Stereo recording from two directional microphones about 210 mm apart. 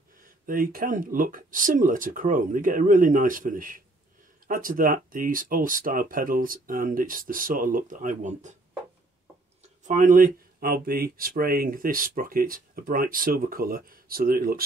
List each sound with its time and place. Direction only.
0.2 s speech: 40° right (ahead or behind)
9.8 s speech: 40° right (ahead or behind)